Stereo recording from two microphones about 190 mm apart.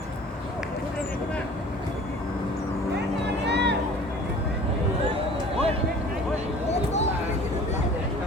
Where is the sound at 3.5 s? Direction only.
65° right (ahead or behind).